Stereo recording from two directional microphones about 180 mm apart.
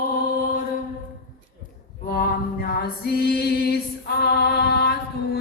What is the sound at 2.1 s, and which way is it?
Music, 55° left (ahead or behind).